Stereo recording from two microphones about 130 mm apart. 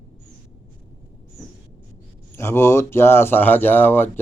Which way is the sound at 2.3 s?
20° left (ahead or behind).